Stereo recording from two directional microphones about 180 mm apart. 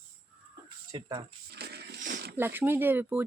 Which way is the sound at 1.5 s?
65° right (ahead or behind).